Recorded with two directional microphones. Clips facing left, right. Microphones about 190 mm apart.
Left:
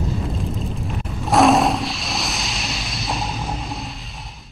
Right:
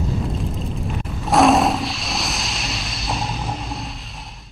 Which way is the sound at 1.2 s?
Centre (ahead or behind).